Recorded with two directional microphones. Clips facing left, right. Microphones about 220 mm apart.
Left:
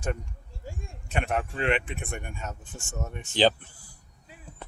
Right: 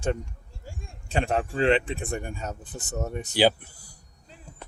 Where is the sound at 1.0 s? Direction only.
30° right (ahead or behind).